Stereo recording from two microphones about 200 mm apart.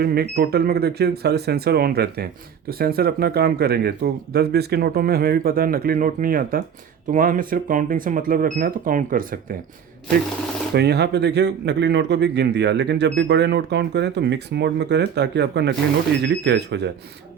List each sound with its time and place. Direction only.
0.0 s speech: 50° right (ahead or behind)
10.8 s a man's voice: 55° right (ahead or behind)